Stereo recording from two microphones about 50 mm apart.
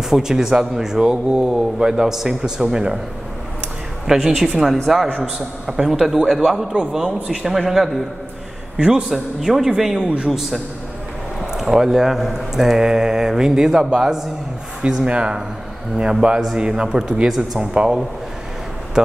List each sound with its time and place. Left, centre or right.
0.1 s speech: centre
4.1 s a woman's voice: centre
8.7 s a man's voice: centre
9.1 s speech: centre
9.9 s speech: right
11.5 s speech: centre